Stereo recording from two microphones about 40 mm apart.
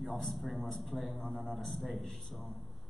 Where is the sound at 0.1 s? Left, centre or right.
Centre.